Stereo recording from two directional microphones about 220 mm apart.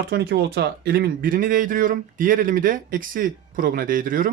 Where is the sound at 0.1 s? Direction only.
45° right (ahead or behind).